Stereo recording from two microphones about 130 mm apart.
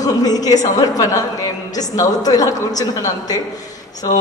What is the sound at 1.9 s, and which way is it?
Speech, 30° left (ahead or behind).